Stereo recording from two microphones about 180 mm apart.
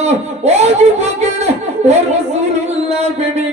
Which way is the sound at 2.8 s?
40° right (ahead or behind).